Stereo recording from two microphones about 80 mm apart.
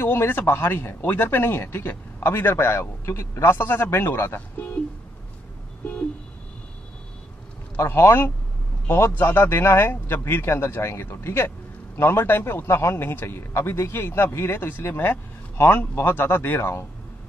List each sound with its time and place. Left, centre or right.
0.0 s speech: left
7.8 s a man's voice: left